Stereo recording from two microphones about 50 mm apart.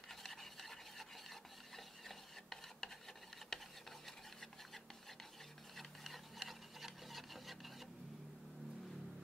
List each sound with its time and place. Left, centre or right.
0.1 s filing: centre
3.4 s stir: centre
5.8 s rub: centre